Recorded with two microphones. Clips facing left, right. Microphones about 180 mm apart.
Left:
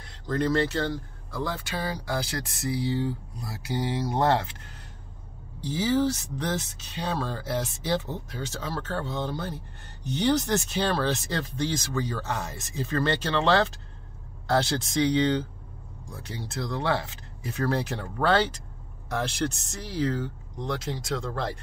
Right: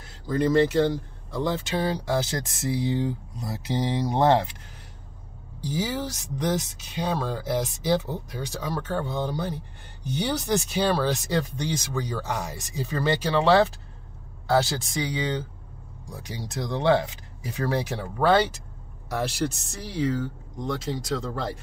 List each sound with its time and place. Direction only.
0.0 s speech: 10° right (ahead or behind)
5.6 s speech: 10° right (ahead or behind)